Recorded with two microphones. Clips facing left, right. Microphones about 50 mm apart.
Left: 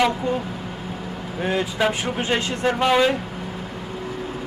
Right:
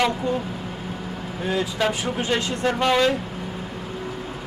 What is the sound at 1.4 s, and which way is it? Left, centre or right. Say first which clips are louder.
Speech: left 2 dB; left.